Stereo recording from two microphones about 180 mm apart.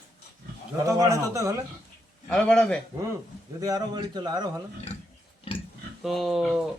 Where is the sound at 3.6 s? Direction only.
25° right (ahead or behind).